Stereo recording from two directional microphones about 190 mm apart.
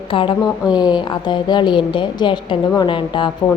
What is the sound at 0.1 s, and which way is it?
Speech, 25° left (ahead or behind).